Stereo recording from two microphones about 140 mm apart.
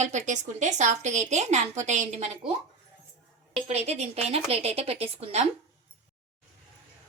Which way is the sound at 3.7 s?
50° right (ahead or behind).